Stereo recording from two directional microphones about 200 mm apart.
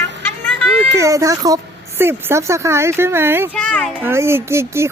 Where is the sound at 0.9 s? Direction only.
15° right (ahead or behind).